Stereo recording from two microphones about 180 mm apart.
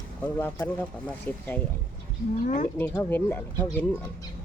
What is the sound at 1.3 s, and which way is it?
Speech, 10° left (ahead or behind).